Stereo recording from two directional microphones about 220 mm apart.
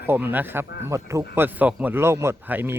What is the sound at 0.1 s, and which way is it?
Speech, 10° right (ahead or behind).